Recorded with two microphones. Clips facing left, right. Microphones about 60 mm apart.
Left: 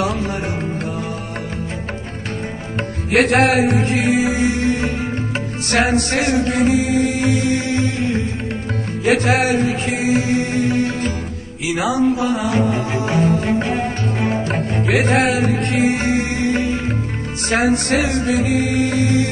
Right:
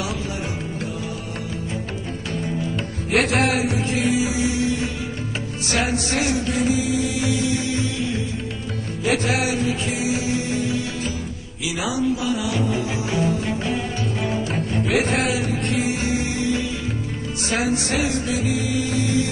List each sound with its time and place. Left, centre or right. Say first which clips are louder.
3.1 s music: left 5 dB; left